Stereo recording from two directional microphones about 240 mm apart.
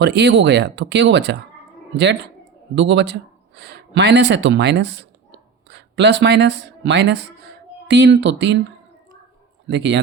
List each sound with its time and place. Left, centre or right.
0.0 s speech: right
9.6 s speech: right